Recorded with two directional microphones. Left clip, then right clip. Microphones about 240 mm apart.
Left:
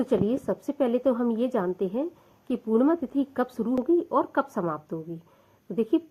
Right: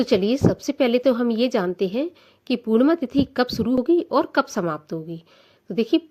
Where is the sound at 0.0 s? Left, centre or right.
Right.